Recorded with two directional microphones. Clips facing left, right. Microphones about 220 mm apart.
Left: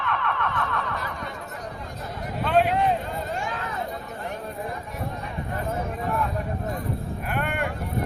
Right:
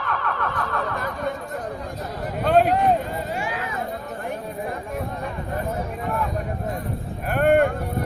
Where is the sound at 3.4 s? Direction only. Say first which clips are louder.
Right 3 dB; 10° right (ahead or behind).